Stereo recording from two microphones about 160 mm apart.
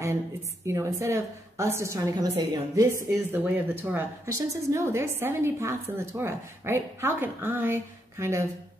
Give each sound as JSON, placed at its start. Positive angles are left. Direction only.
{"t": 0.7, "sound": "a woman's voice", "side_deg": -20}